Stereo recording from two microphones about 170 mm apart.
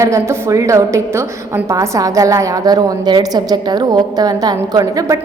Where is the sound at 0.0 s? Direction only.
15° right (ahead or behind).